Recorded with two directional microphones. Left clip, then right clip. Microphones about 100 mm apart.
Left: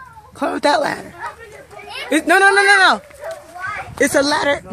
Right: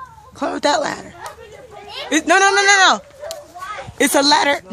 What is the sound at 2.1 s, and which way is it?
Speech, 25° left (ahead or behind).